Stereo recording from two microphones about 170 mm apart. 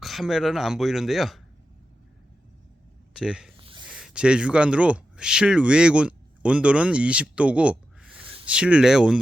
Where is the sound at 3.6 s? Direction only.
30° right (ahead or behind).